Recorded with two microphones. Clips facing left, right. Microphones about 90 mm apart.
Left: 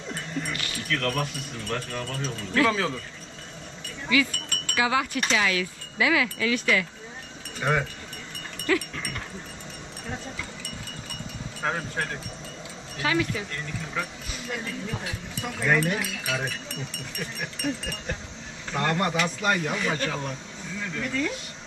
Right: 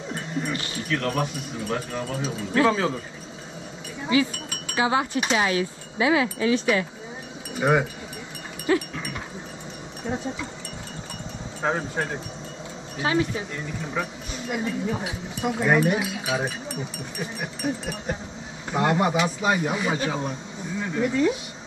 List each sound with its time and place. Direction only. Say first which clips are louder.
0.1 s dog: right 3 dB; 5° right (ahead or behind)
0.5 s speech: right 4 dB; 25° right (ahead or behind)
0.8 s speech: right 2 dB; 5° right (ahead or behind)
4.3 s wind chime: even; 5° right (ahead or behind)
4.7 s speech: right 2 dB; 30° right (ahead or behind)
7.5 s speech: right 5 dB; 10° right (ahead or behind)
8.9 s wind chime: right 2 dB; 10° right (ahead or behind)
11.6 s speech: right 3 dB; 10° right (ahead or behind)
13.0 s speech: right 2 dB; 30° right (ahead or behind)
13.6 s speech: right 3 dB; 10° right (ahead or behind)